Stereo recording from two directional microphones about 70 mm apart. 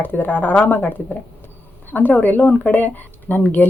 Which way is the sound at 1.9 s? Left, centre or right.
Left.